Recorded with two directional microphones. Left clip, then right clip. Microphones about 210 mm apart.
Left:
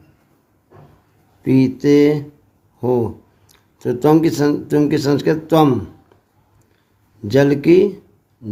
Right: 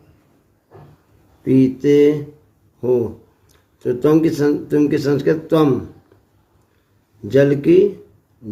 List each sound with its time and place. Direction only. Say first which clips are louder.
1.5 s speech: even; 50° left (ahead or behind)
3.5 s speech: even; 50° left (ahead or behind)
7.3 s speech: left 1 dB; 50° left (ahead or behind)